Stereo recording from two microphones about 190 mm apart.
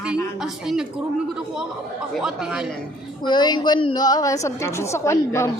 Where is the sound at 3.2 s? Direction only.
25° left (ahead or behind).